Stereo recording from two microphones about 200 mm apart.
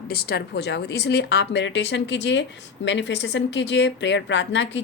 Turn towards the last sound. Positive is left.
turn(degrees=65)  # may be behind; listen again after turning